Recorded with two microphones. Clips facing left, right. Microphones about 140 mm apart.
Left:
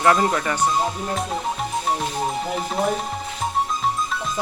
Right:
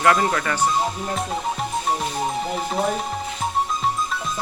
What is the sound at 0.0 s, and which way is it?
Speech, 5° left (ahead or behind).